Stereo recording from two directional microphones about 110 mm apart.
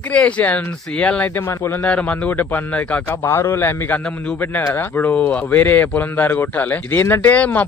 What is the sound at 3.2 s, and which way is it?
Speech, 20° left (ahead or behind).